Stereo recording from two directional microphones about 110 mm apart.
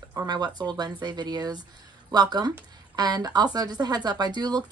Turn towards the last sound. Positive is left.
turn(degrees=-40)  # may be behind; listen again after turning